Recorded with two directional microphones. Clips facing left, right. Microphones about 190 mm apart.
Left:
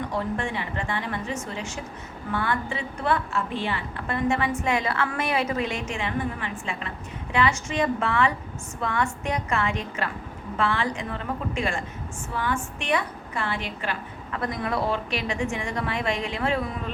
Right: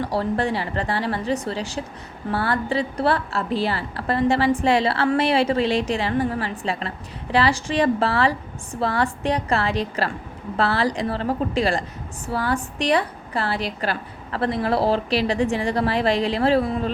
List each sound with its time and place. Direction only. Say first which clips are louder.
0.0 s a woman's voice: right 5 dB; 35° right (ahead or behind)